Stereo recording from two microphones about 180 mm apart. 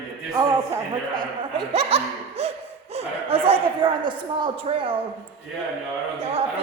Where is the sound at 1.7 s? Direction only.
35° right (ahead or behind).